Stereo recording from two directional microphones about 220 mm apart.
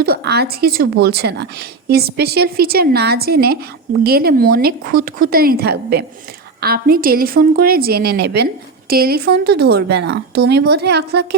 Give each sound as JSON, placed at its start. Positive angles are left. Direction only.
{"t": 0.0, "sound": "speech", "side_deg": -45}